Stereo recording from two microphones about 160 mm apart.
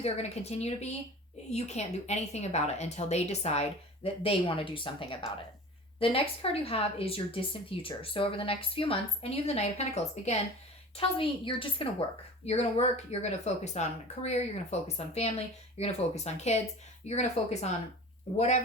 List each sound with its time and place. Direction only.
0.0 s speech: 40° left (ahead or behind)